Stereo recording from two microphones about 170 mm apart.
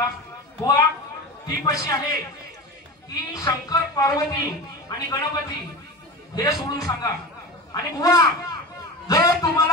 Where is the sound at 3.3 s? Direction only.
20° left (ahead or behind).